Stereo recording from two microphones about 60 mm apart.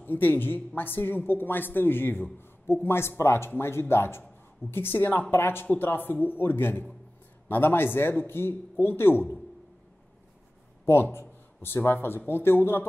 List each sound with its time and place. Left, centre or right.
0.0 s a woman's voice: left
10.9 s a woman's voice: left